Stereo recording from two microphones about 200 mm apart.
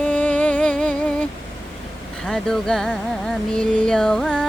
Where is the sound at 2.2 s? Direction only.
5° left (ahead or behind).